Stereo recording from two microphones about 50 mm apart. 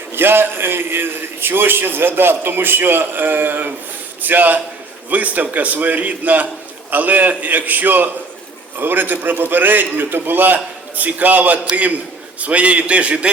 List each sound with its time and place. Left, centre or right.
0.1 s a man's voice: right